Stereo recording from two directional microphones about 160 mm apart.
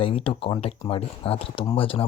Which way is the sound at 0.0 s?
35° left (ahead or behind).